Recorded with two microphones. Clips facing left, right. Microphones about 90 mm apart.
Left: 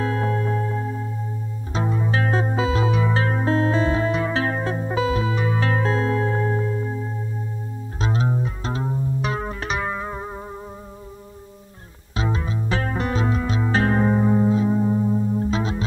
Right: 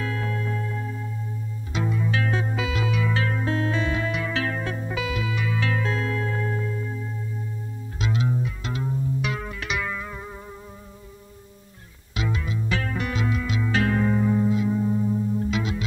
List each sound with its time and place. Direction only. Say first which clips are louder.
0.0 s music: left 6 dB; 35° left (ahead or behind)
12.2 s music: left 3 dB; 35° left (ahead or behind)